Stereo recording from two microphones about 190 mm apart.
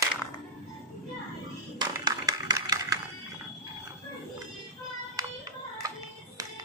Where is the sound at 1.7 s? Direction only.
20° right (ahead or behind).